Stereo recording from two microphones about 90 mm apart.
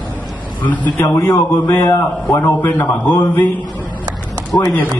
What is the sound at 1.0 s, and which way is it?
Speech, 35° left (ahead or behind).